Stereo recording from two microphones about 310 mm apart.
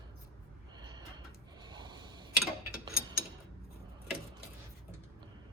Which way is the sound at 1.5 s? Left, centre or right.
Centre.